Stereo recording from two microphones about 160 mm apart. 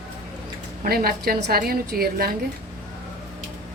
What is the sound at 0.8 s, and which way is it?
A woman's voice, 70° right (ahead or behind).